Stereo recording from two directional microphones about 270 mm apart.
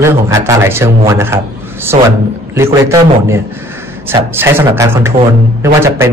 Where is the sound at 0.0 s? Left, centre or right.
Centre.